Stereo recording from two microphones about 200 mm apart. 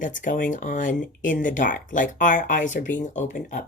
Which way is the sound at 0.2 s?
40° left (ahead or behind).